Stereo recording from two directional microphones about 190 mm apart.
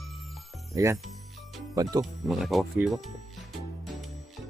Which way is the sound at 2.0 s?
Centre (ahead or behind).